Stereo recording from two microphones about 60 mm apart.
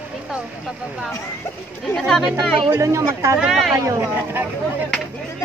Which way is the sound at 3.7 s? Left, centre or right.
Right.